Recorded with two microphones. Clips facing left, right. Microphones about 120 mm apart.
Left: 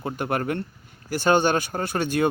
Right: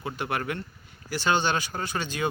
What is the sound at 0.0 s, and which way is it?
Speech, 45° left (ahead or behind).